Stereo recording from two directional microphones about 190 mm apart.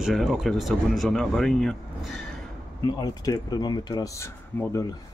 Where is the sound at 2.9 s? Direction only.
20° left (ahead or behind).